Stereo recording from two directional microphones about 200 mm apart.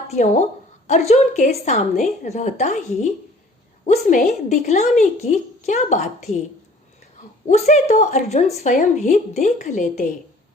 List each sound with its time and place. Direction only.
0.1 s a woman's voice: 35° left (ahead or behind)
7.4 s a woman's voice: 35° left (ahead or behind)